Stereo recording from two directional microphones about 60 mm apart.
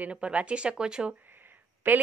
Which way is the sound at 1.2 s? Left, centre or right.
Right.